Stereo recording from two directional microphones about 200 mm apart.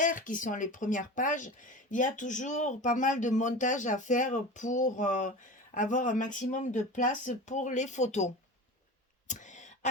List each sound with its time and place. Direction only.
0.0 s speech: 40° left (ahead or behind)
9.2 s throat clearing: 35° left (ahead or behind)